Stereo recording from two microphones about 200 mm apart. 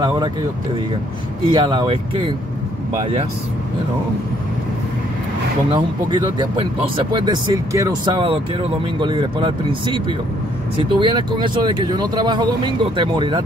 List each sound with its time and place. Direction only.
1.5 s speech: 20° right (ahead or behind)
5.7 s speech: 20° right (ahead or behind)